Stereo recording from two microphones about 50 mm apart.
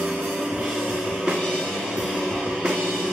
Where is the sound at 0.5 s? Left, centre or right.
Centre.